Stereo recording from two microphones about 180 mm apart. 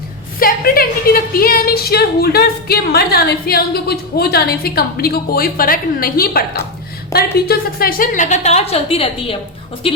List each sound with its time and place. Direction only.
0.3 s a woman's voice: 55° left (ahead or behind); by 9.4 s 30° left (ahead or behind)